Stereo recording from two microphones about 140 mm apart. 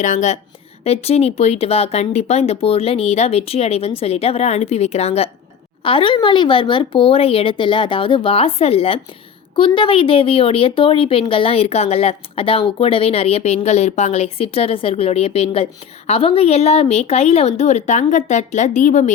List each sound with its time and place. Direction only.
0.0 s a woman's voice: 60° left (ahead or behind)
0.9 s a woman's voice: 50° left (ahead or behind)
5.8 s a woman's voice: 35° left (ahead or behind); by 19.1 s 65° left (ahead or behind)